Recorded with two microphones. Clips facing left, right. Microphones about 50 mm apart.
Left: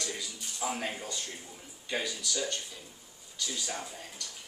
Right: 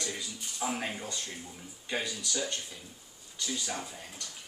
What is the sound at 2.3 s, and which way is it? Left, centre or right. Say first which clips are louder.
Speech: even; centre.